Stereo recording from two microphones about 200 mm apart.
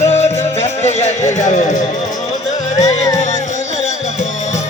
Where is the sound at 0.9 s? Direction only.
35° left (ahead or behind).